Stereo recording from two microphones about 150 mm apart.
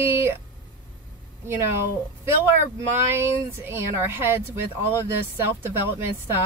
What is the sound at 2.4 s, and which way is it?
Speech, 15° right (ahead or behind).